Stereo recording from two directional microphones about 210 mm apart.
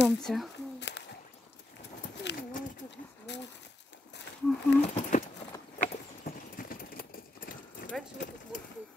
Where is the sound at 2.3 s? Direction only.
55° left (ahead or behind).